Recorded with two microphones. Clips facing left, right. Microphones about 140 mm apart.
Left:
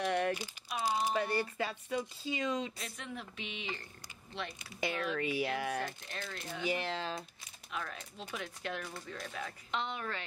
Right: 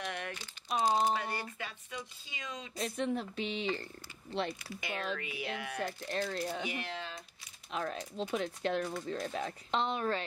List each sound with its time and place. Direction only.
0.0 s crumpling: 35° left (ahead or behind)
0.7 s crumpling: 35° right (ahead or behind)
1.1 s speech: 40° left (ahead or behind)
2.8 s speech: 35° right (ahead or behind)
4.9 s speech: 30° right (ahead or behind)
5.2 s speech: 35° left (ahead or behind)
6.0 s speech: 35° right (ahead or behind)
6.7 s speech: 35° left (ahead or behind)
7.7 s speech: 30° right (ahead or behind)